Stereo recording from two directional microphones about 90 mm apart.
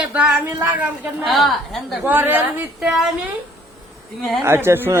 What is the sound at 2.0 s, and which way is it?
Speech, 20° right (ahead or behind).